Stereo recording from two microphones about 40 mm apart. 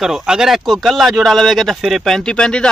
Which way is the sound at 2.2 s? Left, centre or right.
Left.